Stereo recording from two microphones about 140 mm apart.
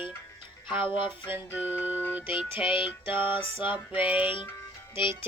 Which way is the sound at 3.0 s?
15° right (ahead or behind).